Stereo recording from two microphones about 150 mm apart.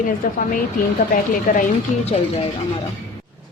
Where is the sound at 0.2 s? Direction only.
60° left (ahead or behind).